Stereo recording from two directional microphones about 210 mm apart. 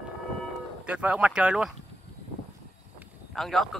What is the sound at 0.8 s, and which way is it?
Speech, 5° right (ahead or behind).